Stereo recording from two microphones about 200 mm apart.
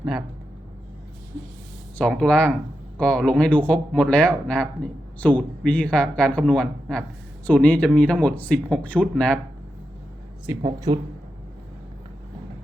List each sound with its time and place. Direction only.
2.0 s speech: 5° left (ahead or behind)
10.6 s speech: 20° right (ahead or behind)